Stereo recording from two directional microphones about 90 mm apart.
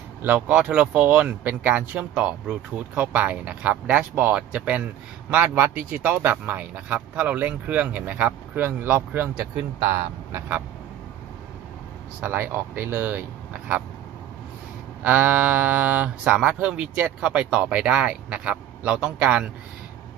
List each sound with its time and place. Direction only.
0.3 s speech: 10° right (ahead or behind); by 9.5 s 25° right (ahead or behind)
12.2 s speech: 25° right (ahead or behind)
15.0 s speech: 15° right (ahead or behind)